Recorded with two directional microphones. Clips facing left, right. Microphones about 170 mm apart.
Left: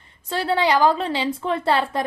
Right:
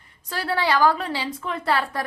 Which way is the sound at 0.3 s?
20° left (ahead or behind).